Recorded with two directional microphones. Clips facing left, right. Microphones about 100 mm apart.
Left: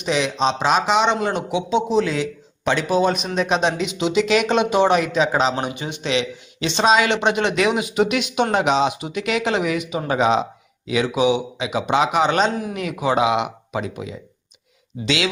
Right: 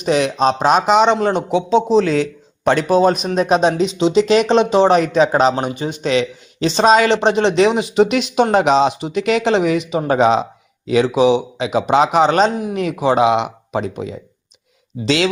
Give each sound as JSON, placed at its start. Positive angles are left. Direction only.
{"t": 0.0, "sound": "speech", "side_deg": -45}
{"t": 5.1, "sound": "speech", "side_deg": -45}